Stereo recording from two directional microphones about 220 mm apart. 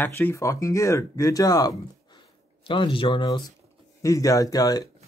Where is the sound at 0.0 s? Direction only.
10° left (ahead or behind).